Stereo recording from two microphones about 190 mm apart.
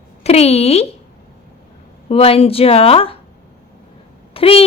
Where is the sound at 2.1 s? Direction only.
30° left (ahead or behind).